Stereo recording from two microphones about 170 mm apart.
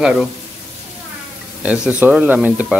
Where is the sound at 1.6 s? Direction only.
5° right (ahead or behind).